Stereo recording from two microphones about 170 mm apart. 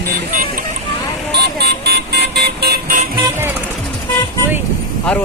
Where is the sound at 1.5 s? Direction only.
75° right (ahead or behind).